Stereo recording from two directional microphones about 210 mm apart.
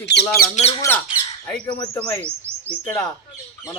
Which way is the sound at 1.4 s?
5° left (ahead or behind).